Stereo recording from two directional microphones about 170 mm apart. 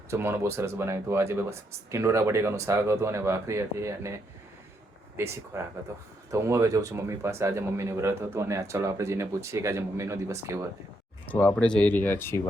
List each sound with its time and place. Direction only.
0.1 s speech: 15° right (ahead or behind)
11.3 s speech: 10° left (ahead or behind)